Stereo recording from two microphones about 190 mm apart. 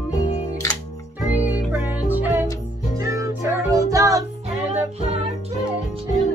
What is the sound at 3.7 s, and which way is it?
Music, 20° right (ahead or behind).